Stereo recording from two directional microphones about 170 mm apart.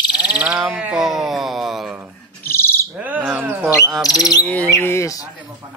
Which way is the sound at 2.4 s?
15° left (ahead or behind).